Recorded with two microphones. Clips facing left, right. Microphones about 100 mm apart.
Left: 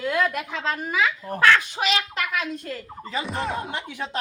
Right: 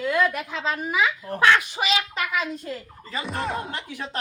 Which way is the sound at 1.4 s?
20° right (ahead or behind).